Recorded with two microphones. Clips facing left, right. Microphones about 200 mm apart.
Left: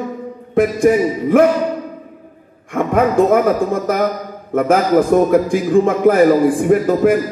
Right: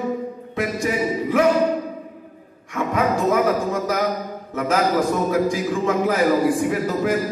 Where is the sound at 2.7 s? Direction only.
55° left (ahead or behind).